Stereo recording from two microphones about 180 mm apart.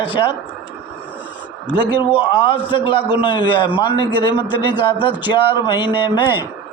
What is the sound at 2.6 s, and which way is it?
A man's voice, 30° left (ahead or behind).